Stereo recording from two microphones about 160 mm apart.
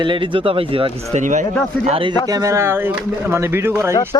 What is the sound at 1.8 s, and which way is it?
Speech, 35° right (ahead or behind).